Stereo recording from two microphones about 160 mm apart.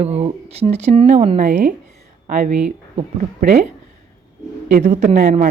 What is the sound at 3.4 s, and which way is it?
Speech, 55° right (ahead or behind).